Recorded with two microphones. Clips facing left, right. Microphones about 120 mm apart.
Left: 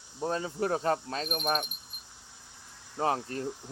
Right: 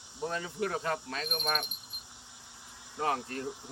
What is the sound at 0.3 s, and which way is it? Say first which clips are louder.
Speech: left 4 dB; 35° left (ahead or behind).